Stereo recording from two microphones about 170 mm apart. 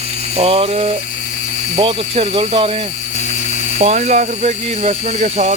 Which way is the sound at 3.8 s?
40° right (ahead or behind).